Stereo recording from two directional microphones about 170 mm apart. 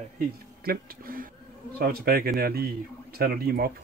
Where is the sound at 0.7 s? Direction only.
55° right (ahead or behind).